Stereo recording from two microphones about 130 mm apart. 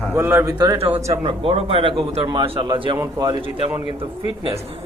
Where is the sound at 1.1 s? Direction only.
45° right (ahead or behind).